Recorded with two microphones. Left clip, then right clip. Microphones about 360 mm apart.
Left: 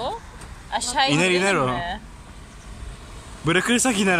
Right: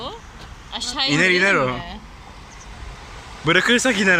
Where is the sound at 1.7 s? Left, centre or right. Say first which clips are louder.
Left 4 dB; left.